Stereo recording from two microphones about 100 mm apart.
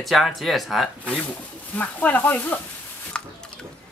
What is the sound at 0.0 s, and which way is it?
Speech, centre (ahead or behind).